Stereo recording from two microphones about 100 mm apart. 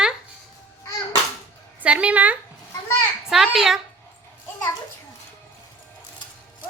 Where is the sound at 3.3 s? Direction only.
5° right (ahead or behind).